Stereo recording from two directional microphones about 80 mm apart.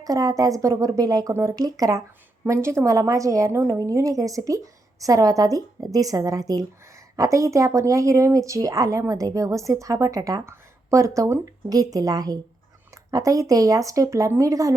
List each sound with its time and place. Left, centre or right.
0.0 s speech: right
2.5 s a woman's voice: right
10.4 s speech: right